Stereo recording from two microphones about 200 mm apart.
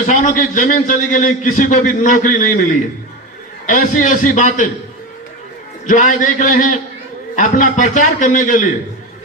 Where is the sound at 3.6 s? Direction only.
40° left (ahead or behind).